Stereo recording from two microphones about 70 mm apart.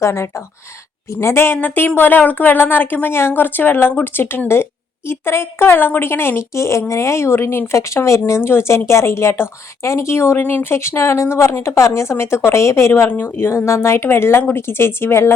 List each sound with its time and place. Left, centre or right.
0.0 s speech: left